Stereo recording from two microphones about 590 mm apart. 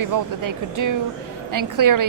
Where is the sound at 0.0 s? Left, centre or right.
Right.